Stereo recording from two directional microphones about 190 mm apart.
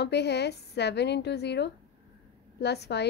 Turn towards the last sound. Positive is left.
turn(degrees=60)  # may be behind; listen again after turning